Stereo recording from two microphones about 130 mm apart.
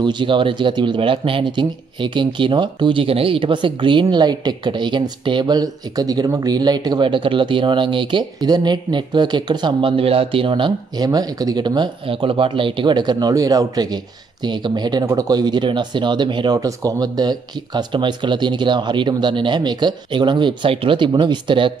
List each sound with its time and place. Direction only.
0.0 s speech: 35° right (ahead or behind)